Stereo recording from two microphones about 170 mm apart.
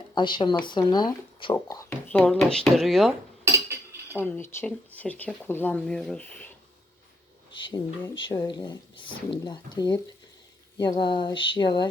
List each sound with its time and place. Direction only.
0.1 s speech: 25° left (ahead or behind)
0.6 s a sound: 25° left (ahead or behind)
2.1 s speech: 5° left (ahead or behind)
3.4 s cutlery: 15° right (ahead or behind)
4.2 s speech: 10° left (ahead or behind)
7.5 s speech: 30° left (ahead or behind)
8.2 s a sound: 30° left (ahead or behind)